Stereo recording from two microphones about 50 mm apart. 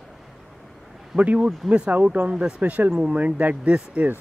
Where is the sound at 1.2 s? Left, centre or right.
Right.